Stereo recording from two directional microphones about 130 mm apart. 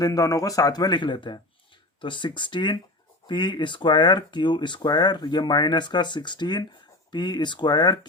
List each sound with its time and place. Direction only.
0.0 s speech: 25° left (ahead or behind)